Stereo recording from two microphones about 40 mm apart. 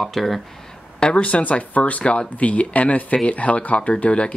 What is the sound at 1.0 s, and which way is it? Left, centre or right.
Speech, left.